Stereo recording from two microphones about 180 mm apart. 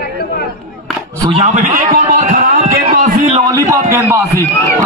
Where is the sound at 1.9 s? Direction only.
50° right (ahead or behind).